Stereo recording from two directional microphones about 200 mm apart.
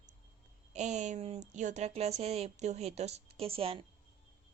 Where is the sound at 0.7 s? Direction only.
35° right (ahead or behind).